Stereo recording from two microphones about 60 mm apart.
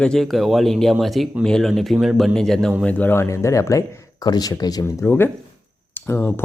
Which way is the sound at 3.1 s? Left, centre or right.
Left.